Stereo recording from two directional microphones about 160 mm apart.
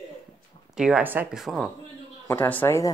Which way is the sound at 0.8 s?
5° right (ahead or behind).